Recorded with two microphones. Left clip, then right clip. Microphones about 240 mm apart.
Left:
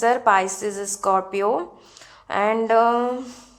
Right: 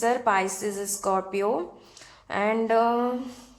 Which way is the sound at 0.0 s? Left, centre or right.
Left.